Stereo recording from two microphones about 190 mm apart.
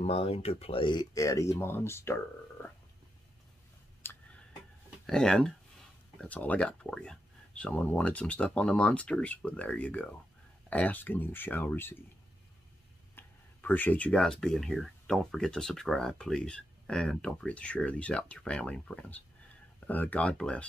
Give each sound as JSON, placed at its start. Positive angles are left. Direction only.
{"t": 0.0, "sound": "speech", "side_deg": 30}
{"t": 4.0, "sound": "tick-tock", "side_deg": 10}
{"t": 5.0, "sound": "speech", "side_deg": 5}
{"t": 13.1, "sound": "speech", "side_deg": 10}